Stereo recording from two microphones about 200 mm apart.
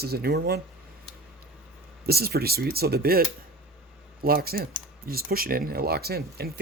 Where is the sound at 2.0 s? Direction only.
50° right (ahead or behind).